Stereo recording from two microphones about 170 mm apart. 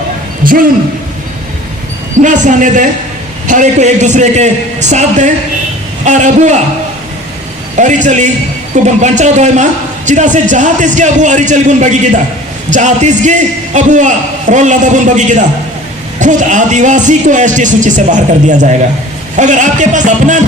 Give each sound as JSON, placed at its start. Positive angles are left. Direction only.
{"t": 0.4, "sound": "a man's voice", "side_deg": -55}
{"t": 2.2, "sound": "a man's voice", "side_deg": -45}
{"t": 7.8, "sound": "a man's voice", "side_deg": -45}